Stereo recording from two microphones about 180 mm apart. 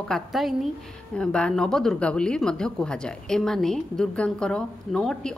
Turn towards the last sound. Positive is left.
turn(degrees=5)  # may be behind; listen again after turning